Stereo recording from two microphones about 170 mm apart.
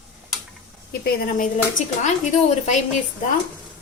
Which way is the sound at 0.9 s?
60° left (ahead or behind).